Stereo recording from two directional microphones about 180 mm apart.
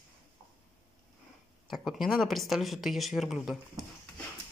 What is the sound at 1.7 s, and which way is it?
Speech, centre (ahead or behind).